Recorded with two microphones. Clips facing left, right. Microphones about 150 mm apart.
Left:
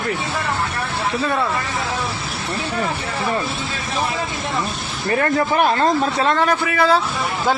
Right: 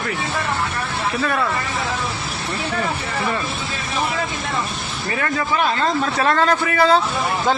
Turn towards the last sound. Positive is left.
turn(degrees=0)  # may be behind; listen again after turning